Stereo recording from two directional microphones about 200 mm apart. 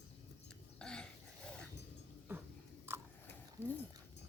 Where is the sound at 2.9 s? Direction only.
10° right (ahead or behind).